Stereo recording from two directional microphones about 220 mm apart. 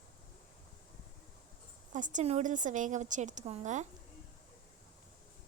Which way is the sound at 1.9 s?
35° right (ahead or behind).